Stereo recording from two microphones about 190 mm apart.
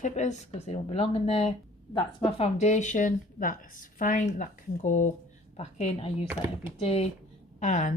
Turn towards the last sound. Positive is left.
turn(degrees=40)  # may be behind; listen again after turning